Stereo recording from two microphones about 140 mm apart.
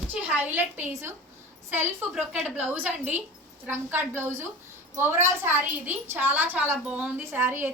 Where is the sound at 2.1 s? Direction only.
5° right (ahead or behind).